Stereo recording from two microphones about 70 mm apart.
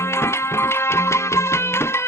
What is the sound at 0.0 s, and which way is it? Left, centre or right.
Music, left.